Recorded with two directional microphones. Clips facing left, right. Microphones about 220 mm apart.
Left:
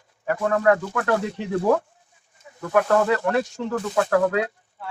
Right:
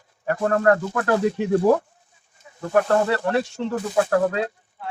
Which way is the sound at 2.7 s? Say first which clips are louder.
Even; 35° right (ahead or behind).